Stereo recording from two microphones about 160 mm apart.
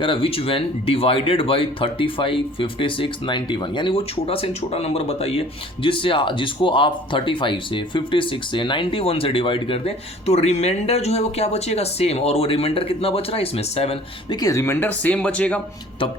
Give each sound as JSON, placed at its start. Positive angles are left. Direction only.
{"t": 0.0, "sound": "speech", "side_deg": 35}
{"t": 14.3, "sound": "speech", "side_deg": 20}